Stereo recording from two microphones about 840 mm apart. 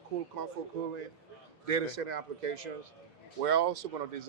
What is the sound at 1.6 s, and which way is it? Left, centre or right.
Speech, right.